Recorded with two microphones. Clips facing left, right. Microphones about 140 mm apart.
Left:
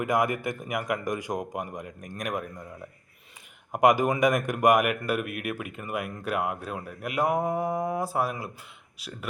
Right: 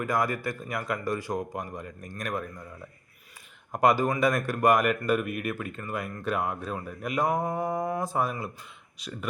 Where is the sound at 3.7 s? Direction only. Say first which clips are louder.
Left 2 dB; 15° left (ahead or behind).